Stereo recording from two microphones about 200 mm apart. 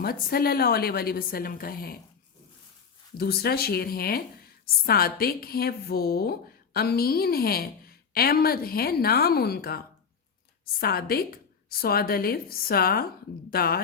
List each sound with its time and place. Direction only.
0.0 s a woman's voice: 50° left (ahead or behind)
3.2 s a woman's voice: 50° left (ahead or behind)